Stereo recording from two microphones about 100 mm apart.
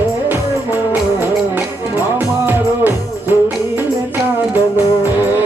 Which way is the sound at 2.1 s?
20° right (ahead or behind).